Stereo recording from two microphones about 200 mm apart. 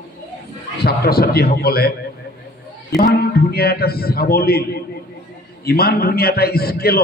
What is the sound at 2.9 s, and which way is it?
A man's voice, 50° left (ahead or behind).